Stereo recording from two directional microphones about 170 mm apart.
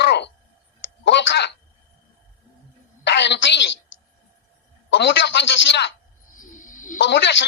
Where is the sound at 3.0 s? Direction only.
90° left.